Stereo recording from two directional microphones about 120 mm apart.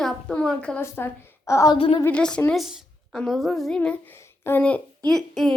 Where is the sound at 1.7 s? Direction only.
50° left (ahead or behind).